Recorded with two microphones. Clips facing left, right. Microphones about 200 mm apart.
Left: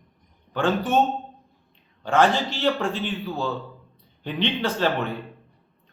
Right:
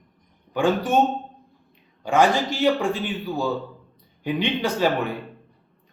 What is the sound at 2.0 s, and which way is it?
A man's voice, 15° right (ahead or behind).